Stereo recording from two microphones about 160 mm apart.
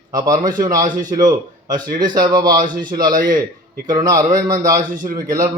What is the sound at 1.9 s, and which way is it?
Speech, 25° right (ahead or behind).